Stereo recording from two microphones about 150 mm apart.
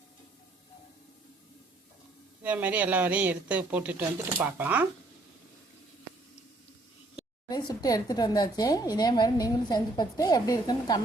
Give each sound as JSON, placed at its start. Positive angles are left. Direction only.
{"t": 2.4, "sound": "speech", "side_deg": -10}
{"t": 7.7, "sound": "a woman's voice", "side_deg": 25}